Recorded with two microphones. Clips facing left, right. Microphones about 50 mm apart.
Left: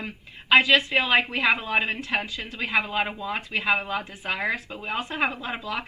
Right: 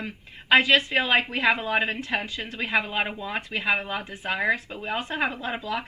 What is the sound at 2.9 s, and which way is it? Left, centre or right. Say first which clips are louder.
A woman's voice: left 1 dB; right.